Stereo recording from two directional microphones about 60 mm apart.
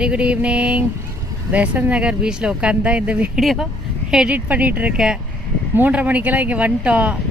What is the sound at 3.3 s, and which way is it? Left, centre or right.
Speech, centre.